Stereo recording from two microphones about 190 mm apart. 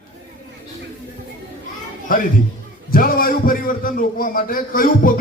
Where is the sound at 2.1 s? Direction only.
45° left (ahead or behind).